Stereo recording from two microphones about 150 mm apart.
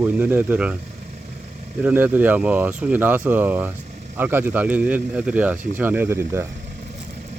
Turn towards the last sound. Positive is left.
turn(degrees=-15)  # may be behind; listen again after turning